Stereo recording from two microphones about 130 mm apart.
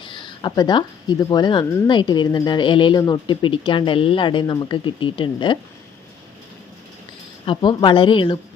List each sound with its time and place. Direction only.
0.0 s speech: 40° left (ahead or behind)
7.4 s speech: 40° left (ahead or behind)